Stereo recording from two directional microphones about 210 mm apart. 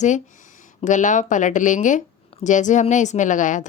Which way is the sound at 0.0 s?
35° left (ahead or behind).